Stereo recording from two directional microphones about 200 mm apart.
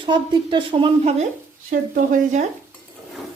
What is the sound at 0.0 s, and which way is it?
A woman's voice, 25° right (ahead or behind).